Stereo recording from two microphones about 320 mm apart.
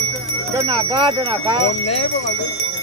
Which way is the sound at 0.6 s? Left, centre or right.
Centre.